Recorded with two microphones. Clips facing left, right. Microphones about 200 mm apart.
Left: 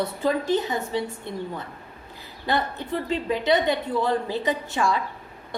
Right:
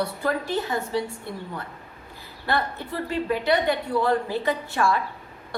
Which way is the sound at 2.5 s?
20° left (ahead or behind).